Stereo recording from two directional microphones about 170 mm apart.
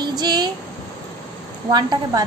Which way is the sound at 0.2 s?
25° right (ahead or behind).